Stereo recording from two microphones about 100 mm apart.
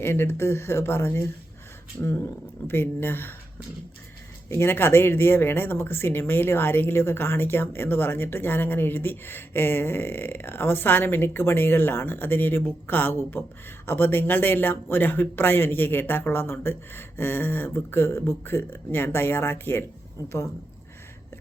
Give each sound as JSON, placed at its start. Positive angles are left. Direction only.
{"t": 0.0, "sound": "speech", "side_deg": 25}
{"t": 4.4, "sound": "speech", "side_deg": 25}